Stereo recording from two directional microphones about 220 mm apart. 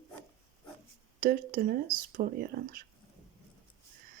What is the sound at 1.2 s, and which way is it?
Speech, 40° right (ahead or behind).